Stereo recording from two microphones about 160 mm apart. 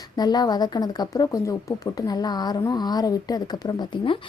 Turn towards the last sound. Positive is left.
turn(degrees=30)  # may be behind; listen again after turning